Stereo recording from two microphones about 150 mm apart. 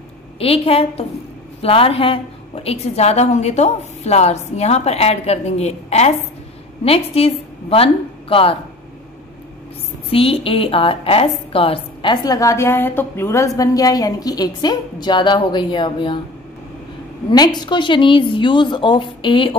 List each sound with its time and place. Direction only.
0.4 s a woman's voice: 40° left (ahead or behind)
10.1 s a woman's voice: 40° left (ahead or behind)
17.3 s a woman's voice: 30° left (ahead or behind)